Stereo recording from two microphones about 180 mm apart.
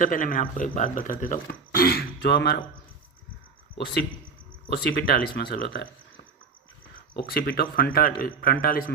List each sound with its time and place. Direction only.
0.0 s speech: 50° left (ahead or behind); by 2.6 s 65° left (ahead or behind)
4.7 s speech: 60° left (ahead or behind)
7.2 s speech: 55° left (ahead or behind)